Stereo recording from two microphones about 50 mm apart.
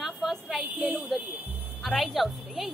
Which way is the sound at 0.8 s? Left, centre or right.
Right.